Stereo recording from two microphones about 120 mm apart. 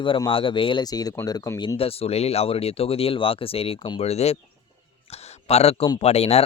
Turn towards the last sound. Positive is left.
turn(degrees=60)  # may be behind; listen again after turning